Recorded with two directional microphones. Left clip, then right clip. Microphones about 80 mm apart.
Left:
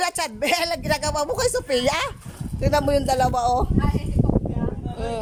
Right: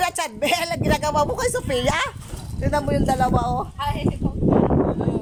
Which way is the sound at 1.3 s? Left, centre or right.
Left.